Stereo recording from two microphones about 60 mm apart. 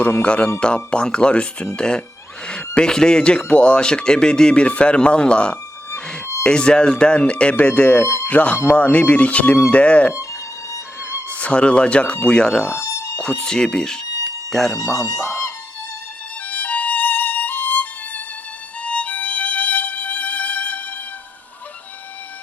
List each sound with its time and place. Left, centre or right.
0.2 s speech: centre
7.5 s speech: left
8.0 s speech: left
8.3 s speech: left
11.3 s speech: left
12.6 s music: left
13.2 s speech: centre
15.0 s speech: left
16.5 s violin: left
18.8 s music: left